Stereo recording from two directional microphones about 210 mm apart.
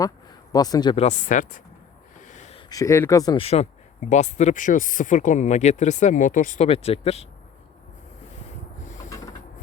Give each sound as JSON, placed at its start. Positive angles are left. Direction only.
{"t": 0.0, "sound": "speech", "side_deg": 20}
{"t": 1.0, "sound": "speech", "side_deg": 35}
{"t": 2.2, "sound": "a sound", "side_deg": 35}
{"t": 2.6, "sound": "speech", "side_deg": 15}